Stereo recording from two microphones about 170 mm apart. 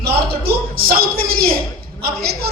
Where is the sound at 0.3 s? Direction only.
65° right (ahead or behind).